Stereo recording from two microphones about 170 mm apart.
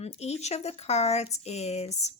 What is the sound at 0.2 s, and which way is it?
Speech, 40° left (ahead or behind).